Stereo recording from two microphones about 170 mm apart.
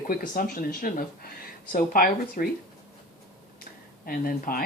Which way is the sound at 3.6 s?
60° left (ahead or behind).